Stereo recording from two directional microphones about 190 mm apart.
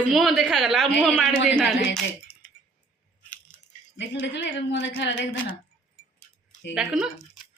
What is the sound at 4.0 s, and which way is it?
A woman's voice, 70° left (ahead or behind).